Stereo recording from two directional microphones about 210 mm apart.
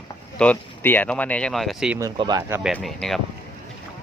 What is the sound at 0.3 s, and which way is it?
Speech, 5° left (ahead or behind).